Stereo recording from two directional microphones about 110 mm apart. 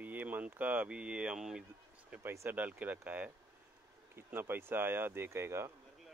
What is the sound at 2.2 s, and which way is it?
Speech, 20° right (ahead or behind).